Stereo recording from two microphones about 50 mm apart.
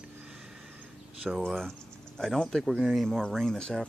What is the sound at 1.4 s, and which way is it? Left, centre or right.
Speech, centre.